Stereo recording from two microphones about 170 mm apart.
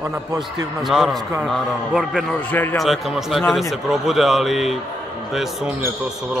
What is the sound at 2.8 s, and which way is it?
Speech, centre (ahead or behind).